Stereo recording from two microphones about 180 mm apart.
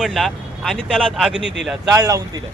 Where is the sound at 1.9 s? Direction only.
20° right (ahead or behind).